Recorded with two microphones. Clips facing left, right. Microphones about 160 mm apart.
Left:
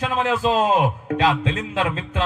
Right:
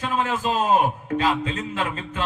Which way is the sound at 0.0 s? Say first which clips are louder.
Left 3 dB; 90° left.